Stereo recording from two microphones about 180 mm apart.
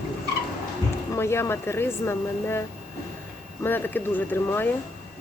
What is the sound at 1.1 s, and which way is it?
Speech, 15° left (ahead or behind).